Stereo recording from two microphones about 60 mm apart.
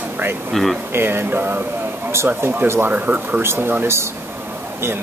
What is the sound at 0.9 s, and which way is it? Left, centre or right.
Speech, right.